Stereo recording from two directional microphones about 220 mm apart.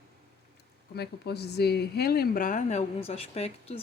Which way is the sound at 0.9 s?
50° left (ahead or behind).